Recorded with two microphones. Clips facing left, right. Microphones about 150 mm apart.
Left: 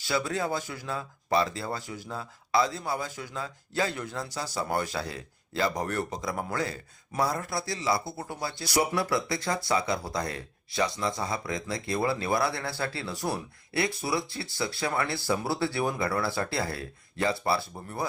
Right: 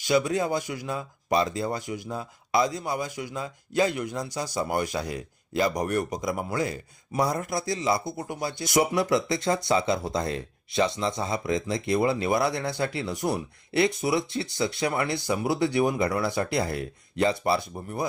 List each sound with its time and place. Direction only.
0.0 s speech: 15° right (ahead or behind)